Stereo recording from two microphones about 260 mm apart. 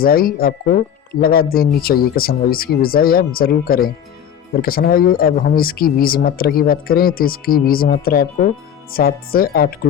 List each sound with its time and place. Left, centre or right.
0.0 s speech: left